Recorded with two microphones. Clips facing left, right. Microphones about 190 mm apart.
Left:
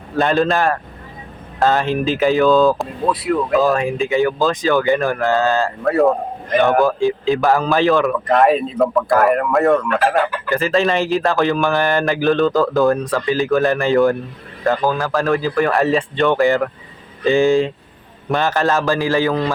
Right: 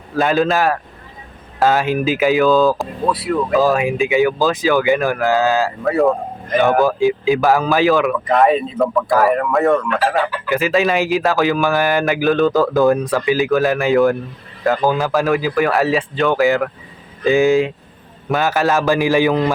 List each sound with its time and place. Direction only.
0.2 s a man's voice: centre (ahead or behind)
14.8 s speech: 20° right (ahead or behind)
15.1 s a man's voice: 5° right (ahead or behind)